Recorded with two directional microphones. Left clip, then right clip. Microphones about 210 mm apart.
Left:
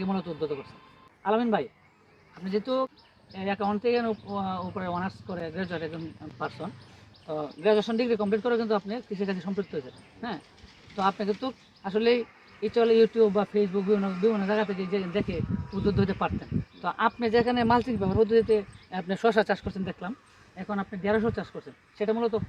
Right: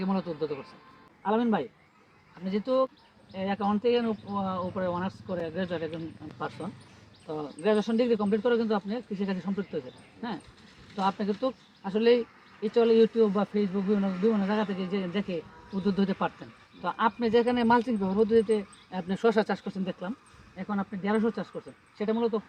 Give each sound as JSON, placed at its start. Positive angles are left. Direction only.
{"t": 0.0, "sound": "speech", "side_deg": 10}